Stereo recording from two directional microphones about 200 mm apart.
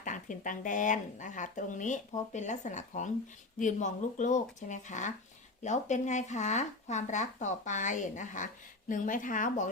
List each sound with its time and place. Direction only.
0.0 s speech: 40° left (ahead or behind)